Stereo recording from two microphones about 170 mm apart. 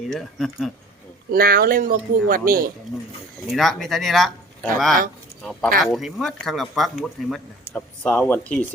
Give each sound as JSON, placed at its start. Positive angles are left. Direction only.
{"t": 0.1, "sound": "speech", "side_deg": 0}
{"t": 1.3, "sound": "speech", "side_deg": -60}
{"t": 3.5, "sound": "speech", "side_deg": 0}